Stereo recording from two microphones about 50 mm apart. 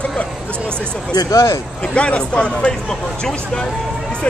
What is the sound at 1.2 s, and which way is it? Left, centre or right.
Speech, left.